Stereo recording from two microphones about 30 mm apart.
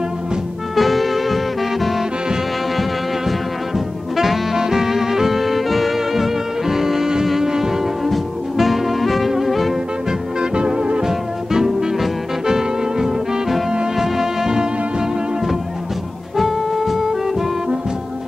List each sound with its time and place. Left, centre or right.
0.7 s music: centre
2.8 s brass instrument: centre
4.6 s music: centre
8.1 s music: centre
10.5 s music: right
11.0 s music: centre
16.3 s music: centre